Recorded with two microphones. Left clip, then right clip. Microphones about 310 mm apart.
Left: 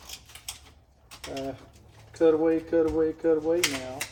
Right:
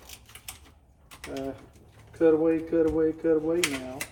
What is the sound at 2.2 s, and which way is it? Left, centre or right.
Speech, left.